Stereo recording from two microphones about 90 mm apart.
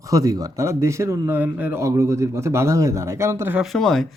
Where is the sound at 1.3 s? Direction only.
20° right (ahead or behind).